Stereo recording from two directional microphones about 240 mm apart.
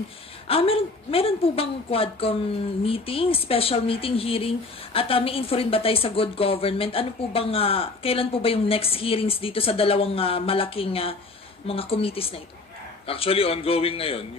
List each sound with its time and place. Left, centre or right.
0.5 s speech: left